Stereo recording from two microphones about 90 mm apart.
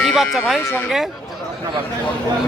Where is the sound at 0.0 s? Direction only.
5° right (ahead or behind).